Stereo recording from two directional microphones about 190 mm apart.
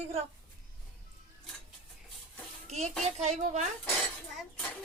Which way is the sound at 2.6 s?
35° right (ahead or behind).